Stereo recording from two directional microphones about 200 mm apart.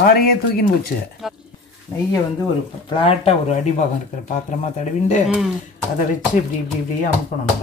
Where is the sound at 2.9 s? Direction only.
30° left (ahead or behind).